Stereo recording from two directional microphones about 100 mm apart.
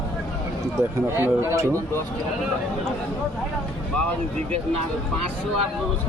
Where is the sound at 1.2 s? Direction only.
25° right (ahead or behind).